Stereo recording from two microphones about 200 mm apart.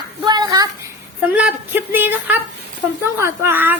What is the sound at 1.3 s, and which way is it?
Speech, 10° right (ahead or behind).